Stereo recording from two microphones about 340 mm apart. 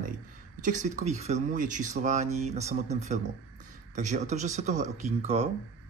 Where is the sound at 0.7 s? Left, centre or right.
Right.